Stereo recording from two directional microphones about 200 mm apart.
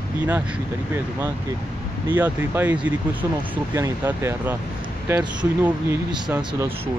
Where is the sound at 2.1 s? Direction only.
10° right (ahead or behind).